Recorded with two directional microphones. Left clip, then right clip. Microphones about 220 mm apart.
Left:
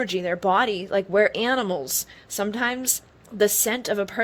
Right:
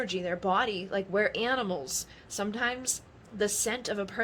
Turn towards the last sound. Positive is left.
turn(degrees=35)  # may be behind; listen again after turning